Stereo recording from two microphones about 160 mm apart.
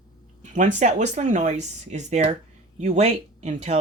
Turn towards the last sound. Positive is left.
turn(degrees=-45)  # may be behind; listen again after turning